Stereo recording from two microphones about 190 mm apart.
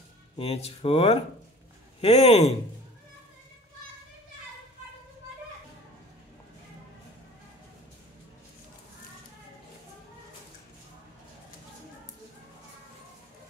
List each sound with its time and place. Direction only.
0.4 s speech: 30° left (ahead or behind)